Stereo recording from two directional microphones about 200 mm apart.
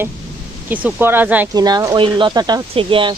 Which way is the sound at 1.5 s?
20° right (ahead or behind).